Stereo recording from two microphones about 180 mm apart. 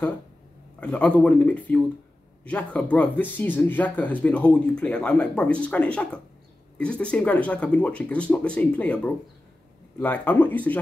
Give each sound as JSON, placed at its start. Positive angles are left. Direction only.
{"t": 0.7, "sound": "speech", "side_deg": 5}